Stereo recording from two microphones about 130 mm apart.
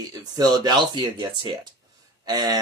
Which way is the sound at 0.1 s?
30° right (ahead or behind).